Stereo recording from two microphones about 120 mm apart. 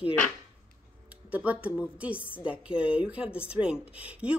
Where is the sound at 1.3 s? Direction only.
15° right (ahead or behind).